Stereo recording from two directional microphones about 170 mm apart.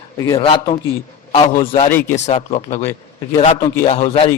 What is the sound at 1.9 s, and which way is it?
Speech, 50° left (ahead or behind).